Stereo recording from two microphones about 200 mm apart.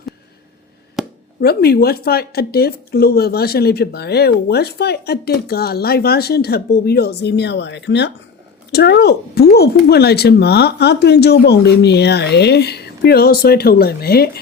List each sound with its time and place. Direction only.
1.0 s chop: centre (ahead or behind)
1.4 s speech: 50° left (ahead or behind)